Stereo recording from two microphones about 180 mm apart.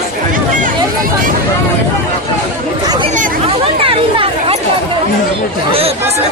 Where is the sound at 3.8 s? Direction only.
30° right (ahead or behind).